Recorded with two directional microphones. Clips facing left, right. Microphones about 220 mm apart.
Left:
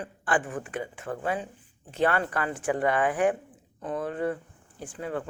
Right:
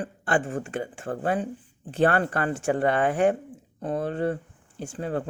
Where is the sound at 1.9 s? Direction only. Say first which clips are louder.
Right 3 dB; 35° right (ahead or behind).